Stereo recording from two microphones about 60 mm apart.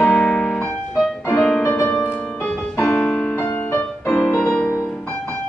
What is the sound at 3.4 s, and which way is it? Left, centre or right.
Music, left.